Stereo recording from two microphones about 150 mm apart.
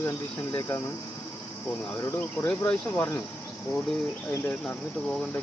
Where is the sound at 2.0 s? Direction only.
20° left (ahead or behind).